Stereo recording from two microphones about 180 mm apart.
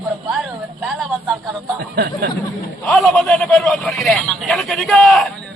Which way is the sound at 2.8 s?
Centre (ahead or behind).